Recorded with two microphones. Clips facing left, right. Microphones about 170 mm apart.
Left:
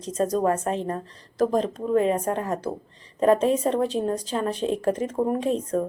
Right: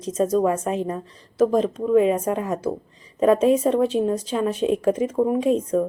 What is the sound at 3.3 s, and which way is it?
Speech, 30° left (ahead or behind).